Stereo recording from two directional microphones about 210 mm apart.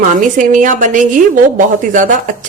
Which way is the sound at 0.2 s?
40° right (ahead or behind).